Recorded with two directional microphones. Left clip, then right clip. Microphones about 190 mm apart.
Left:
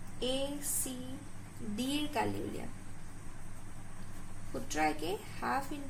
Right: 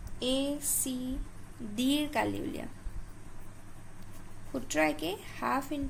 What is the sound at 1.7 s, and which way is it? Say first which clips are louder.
Speech: right 5 dB; 60° right (ahead or behind).